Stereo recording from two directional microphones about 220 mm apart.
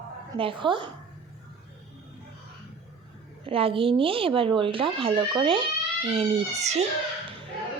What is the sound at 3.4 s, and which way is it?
Speech, 25° right (ahead or behind).